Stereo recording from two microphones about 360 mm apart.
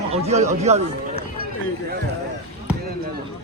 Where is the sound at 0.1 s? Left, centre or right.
Centre.